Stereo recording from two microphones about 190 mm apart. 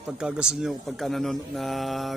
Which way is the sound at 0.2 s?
5° right (ahead or behind).